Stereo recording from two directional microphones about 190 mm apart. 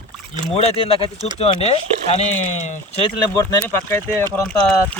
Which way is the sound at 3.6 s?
10° left (ahead or behind).